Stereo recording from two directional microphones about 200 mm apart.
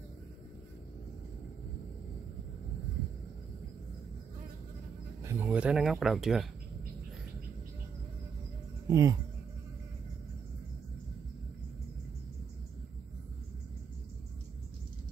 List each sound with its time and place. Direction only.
5.2 s speech: 10° right (ahead or behind)
8.8 s music: 15° right (ahead or behind)